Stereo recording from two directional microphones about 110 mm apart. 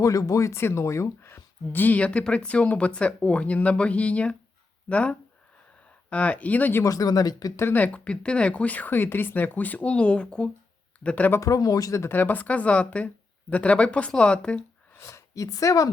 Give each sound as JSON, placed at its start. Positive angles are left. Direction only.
{"t": 0.0, "sound": "speech", "side_deg": 30}
{"t": 6.8, "sound": "speech", "side_deg": 35}
{"t": 7.6, "sound": "speech", "side_deg": 15}
{"t": 11.3, "sound": "speech", "side_deg": 30}
{"t": 14.9, "sound": "speech", "side_deg": 25}